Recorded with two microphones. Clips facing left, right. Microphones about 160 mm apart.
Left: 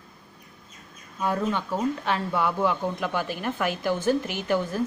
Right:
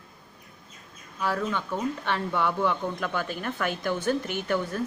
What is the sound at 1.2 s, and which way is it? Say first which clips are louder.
Speech: left 2 dB; 15° left (ahead or behind).